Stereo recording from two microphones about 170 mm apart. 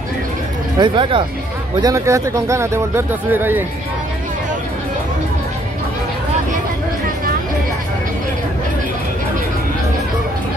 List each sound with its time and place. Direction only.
0.7 s speech: 25° right (ahead or behind); by 3.6 s 10° right (ahead or behind)